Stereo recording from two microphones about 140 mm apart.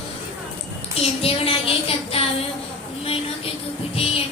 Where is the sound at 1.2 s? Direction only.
45° left (ahead or behind).